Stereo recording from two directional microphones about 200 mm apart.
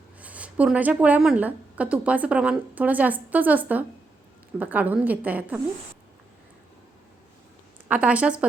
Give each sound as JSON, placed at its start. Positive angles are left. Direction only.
{"t": 0.2, "sound": "speech", "side_deg": -5}
{"t": 7.9, "sound": "speech", "side_deg": -5}